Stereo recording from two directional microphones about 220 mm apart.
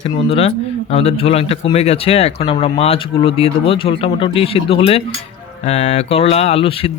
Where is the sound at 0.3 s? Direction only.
25° left (ahead or behind).